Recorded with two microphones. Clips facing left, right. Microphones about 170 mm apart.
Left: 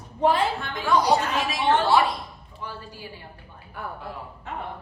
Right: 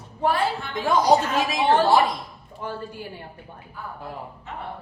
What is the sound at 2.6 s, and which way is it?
Speech, 50° right (ahead or behind).